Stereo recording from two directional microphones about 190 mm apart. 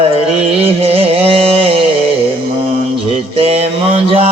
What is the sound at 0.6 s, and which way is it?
Music, 30° right (ahead or behind).